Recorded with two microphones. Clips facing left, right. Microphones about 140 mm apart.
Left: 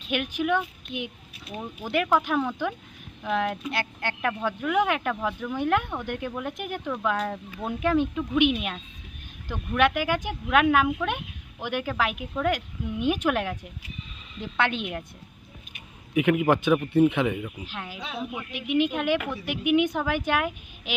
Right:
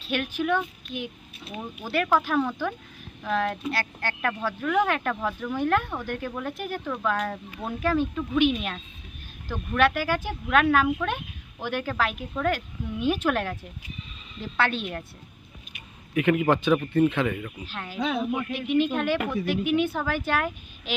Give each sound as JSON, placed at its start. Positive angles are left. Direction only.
{"t": 0.0, "sound": "a woman's voice", "side_deg": 15}
{"t": 16.1, "sound": "a woman's voice", "side_deg": 10}
{"t": 17.9, "sound": "speech", "side_deg": -60}
{"t": 18.5, "sound": "a woman's voice", "side_deg": 15}